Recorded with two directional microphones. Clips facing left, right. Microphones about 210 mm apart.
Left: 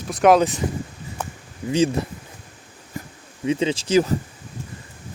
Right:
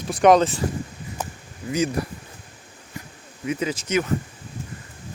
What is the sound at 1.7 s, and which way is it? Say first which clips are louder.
Speech: left 4 dB; 30° left (ahead or behind).